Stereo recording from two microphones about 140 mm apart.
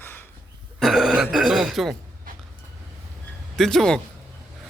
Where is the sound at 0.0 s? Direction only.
15° left (ahead or behind).